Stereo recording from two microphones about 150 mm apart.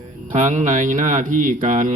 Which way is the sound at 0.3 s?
60° right (ahead or behind).